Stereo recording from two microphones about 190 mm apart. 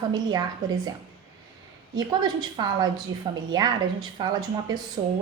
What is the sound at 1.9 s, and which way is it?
A woman's voice, 20° right (ahead or behind).